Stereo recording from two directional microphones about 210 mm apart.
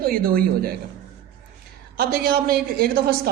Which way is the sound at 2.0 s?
45° right (ahead or behind).